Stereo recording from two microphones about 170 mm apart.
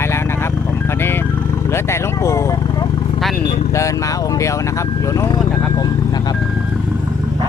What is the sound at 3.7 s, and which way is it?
Speech, 20° left (ahead or behind).